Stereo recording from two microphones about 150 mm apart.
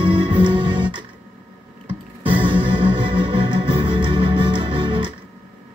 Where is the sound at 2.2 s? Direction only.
35° right (ahead or behind).